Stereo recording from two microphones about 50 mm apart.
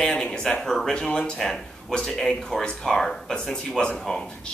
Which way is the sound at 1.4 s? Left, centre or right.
Centre.